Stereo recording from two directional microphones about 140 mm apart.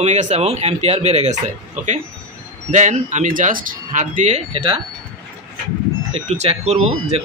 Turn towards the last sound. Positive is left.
turn(degrees=-50)  # may be behind; listen again after turning